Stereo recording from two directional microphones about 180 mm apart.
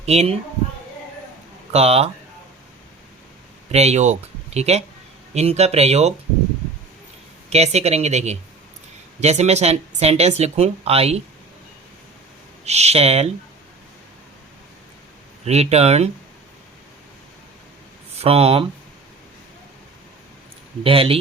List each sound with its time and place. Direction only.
0.0 s speech: 35° right (ahead or behind)
1.7 s speech: 35° right (ahead or behind)
3.7 s speech: 35° right (ahead or behind)
7.5 s speech: 35° right (ahead or behind)
12.6 s speech: 35° right (ahead or behind)
15.4 s speech: 35° right (ahead or behind)
18.2 s speech: 35° right (ahead or behind)
20.8 s speech: 30° right (ahead or behind)